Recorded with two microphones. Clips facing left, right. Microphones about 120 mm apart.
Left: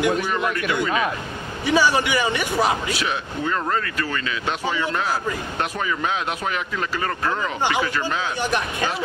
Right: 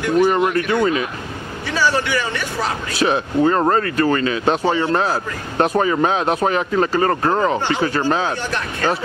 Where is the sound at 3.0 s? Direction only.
40° right (ahead or behind).